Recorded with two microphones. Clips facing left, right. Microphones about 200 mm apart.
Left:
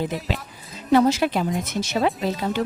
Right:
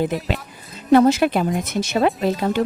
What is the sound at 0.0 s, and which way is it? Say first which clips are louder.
A woman's voice: right 4 dB; 60° right (ahead or behind).